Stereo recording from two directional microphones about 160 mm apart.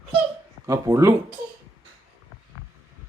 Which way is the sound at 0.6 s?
20° right (ahead or behind).